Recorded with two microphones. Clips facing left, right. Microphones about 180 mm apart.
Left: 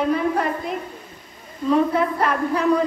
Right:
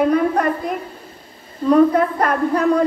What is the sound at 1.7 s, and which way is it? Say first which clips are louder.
Speech: right 5 dB; 45° right (ahead or behind).